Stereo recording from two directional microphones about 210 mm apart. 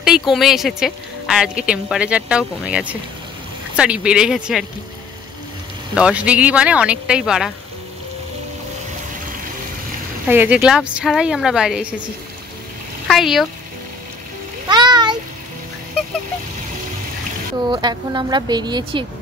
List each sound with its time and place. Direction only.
0.0 s speech: centre (ahead or behind)
5.9 s speech: 5° right (ahead or behind)
10.2 s speech: 5° right (ahead or behind)
13.1 s speech: centre (ahead or behind)
14.7 s a sound: 20° right (ahead or behind)
17.6 s speech: 20° right (ahead or behind)